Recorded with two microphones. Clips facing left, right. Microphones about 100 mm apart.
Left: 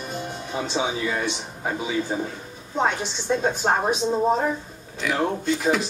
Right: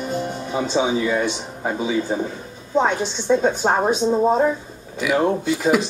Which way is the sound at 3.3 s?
Centre (ahead or behind).